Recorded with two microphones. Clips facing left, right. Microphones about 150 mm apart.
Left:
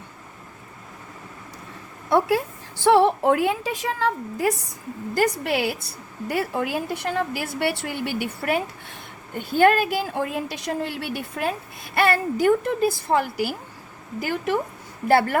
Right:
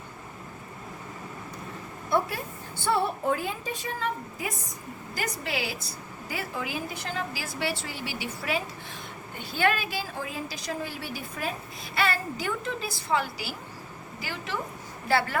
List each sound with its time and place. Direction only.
2.0 s a woman's voice: 85° left
5.1 s a woman's voice: 60° left (ahead or behind)
11.9 s a woman's voice: 55° left (ahead or behind)